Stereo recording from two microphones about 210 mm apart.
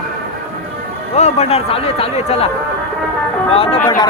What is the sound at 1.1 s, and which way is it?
A man's voice, 30° left (ahead or behind).